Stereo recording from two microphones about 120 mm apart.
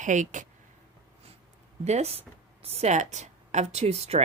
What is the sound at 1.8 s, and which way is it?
A woman's voice, 65° right (ahead or behind).